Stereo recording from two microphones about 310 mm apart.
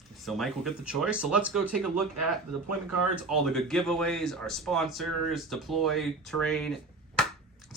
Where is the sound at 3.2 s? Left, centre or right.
Centre.